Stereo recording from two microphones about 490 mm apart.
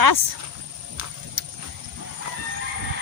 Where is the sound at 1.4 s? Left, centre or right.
Right.